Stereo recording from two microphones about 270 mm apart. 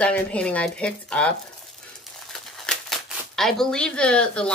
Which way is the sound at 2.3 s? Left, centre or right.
Centre.